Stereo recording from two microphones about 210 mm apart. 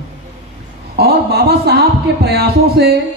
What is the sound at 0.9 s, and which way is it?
Speech, 50° right (ahead or behind).